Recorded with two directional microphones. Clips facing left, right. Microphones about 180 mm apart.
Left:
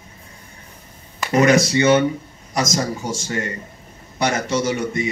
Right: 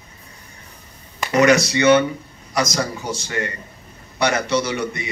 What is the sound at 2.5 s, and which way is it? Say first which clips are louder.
Speech: even; 45° left (ahead or behind).